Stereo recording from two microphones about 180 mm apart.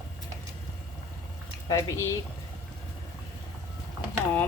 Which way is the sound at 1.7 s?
15° left (ahead or behind).